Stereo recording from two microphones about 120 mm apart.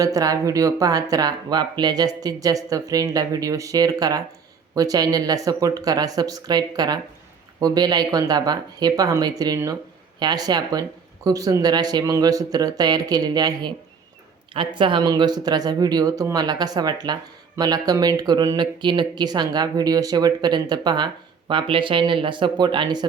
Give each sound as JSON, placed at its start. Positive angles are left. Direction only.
{"t": 0.0, "sound": "speech", "side_deg": -30}